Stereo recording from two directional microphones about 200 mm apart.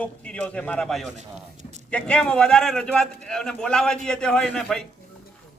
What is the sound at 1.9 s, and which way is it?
A man's voice, 5° left (ahead or behind).